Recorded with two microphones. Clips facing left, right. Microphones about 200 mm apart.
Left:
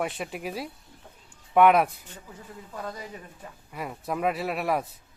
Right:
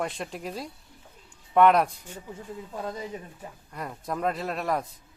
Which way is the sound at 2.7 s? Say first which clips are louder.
Right 2 dB; 25° right (ahead or behind).